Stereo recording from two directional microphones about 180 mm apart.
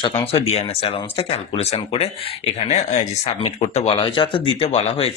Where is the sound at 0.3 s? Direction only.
35° left (ahead or behind).